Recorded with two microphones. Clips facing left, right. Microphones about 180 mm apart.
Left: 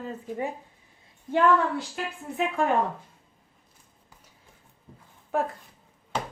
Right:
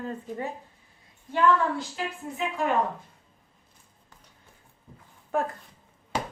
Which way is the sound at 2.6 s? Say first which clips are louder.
Left 2 dB; 55° left (ahead or behind).